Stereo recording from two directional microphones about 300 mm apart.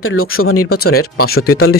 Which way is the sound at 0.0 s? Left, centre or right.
Left.